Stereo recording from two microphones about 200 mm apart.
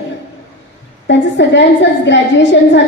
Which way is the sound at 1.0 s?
60° left (ahead or behind).